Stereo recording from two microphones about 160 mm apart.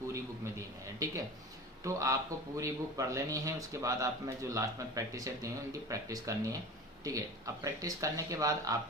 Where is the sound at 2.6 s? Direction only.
20° right (ahead or behind).